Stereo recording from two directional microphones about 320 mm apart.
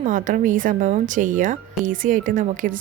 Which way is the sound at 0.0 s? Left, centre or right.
Right.